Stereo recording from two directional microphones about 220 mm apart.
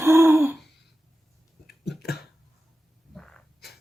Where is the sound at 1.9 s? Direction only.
45° left (ahead or behind).